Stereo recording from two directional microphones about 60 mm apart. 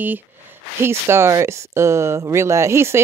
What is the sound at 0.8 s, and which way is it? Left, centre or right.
Speech, right.